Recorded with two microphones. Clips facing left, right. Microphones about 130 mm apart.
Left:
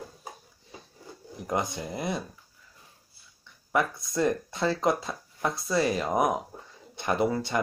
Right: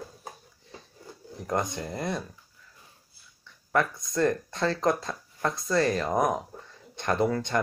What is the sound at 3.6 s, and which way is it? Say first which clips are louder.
Speech: right 1 dB; 10° left (ahead or behind).